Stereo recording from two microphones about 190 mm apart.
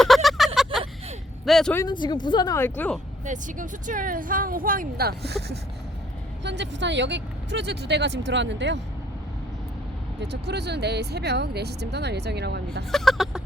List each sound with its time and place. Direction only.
0.0 s vehicle: centre (ahead or behind)
1.5 s speech: centre (ahead or behind)
1.7 s speech: 20° left (ahead or behind)
3.2 s speech: 40° right (ahead or behind); by 8.8 s 70° right (ahead or behind)
10.2 s speech: 65° right (ahead or behind)
12.9 s speech: centre (ahead or behind)